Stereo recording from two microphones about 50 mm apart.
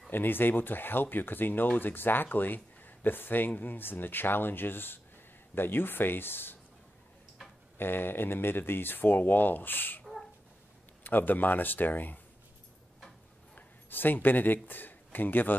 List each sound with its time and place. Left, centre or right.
0.1 s speech: left
7.7 s speech: left
11.1 s speech: left
13.6 s speech: left